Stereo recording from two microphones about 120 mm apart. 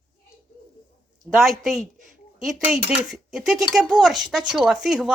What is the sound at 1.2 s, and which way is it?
Speech, centre (ahead or behind).